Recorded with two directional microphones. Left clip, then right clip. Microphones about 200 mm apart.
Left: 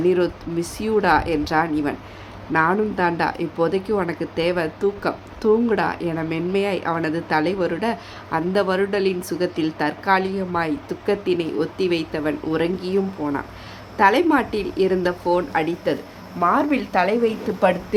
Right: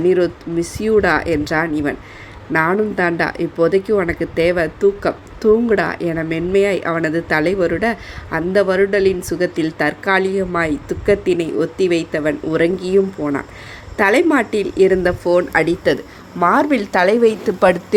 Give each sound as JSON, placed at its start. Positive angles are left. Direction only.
{"t": 0.0, "sound": "speech", "side_deg": -10}
{"t": 15.5, "sound": "a woman's voice", "side_deg": -30}